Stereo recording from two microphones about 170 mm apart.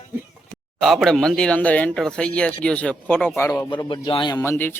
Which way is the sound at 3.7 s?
25° left (ahead or behind).